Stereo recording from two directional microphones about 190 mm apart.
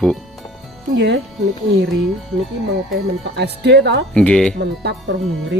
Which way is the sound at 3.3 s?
60° right (ahead or behind).